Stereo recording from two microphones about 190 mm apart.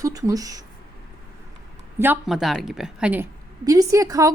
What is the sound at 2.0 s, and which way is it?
A woman's voice, 5° right (ahead or behind).